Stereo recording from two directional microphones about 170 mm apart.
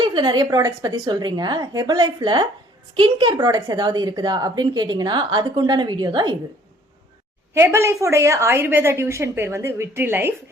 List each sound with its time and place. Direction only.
0.0 s speech: 30° right (ahead or behind)
7.5 s a woman's voice: 15° right (ahead or behind)